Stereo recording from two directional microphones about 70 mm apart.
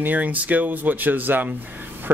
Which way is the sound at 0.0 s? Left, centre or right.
Right.